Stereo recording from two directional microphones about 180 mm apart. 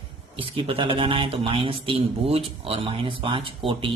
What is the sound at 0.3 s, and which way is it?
Speech, 30° right (ahead or behind).